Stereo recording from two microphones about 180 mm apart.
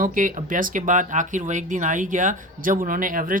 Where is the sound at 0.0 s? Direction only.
50° right (ahead or behind).